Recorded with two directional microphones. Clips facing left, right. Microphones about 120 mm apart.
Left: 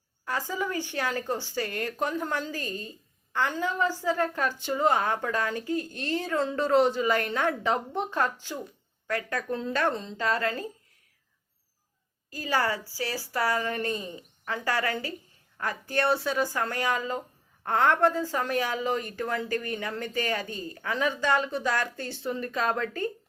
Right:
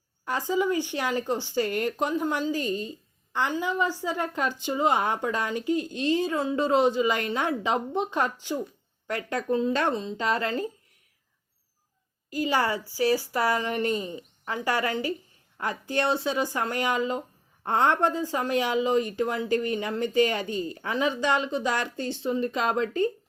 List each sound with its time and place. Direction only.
0.3 s speech: 20° right (ahead or behind)
12.4 s speech: 20° right (ahead or behind)